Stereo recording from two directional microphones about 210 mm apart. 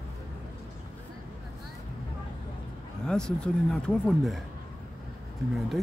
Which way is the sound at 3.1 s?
5° left (ahead or behind).